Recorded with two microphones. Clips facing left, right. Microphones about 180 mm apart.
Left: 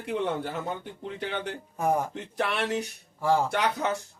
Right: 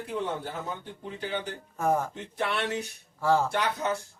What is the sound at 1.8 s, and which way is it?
Speech, 15° left (ahead or behind).